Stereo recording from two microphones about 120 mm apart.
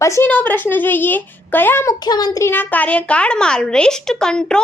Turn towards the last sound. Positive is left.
turn(degrees=5)  # may be behind; listen again after turning